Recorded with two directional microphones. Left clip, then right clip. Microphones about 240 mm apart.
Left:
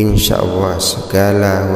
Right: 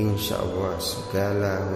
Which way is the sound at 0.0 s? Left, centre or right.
Left.